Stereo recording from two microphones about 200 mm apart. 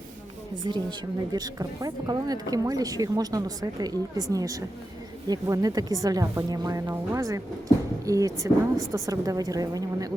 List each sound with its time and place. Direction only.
0.6 s speech: 20° right (ahead or behind)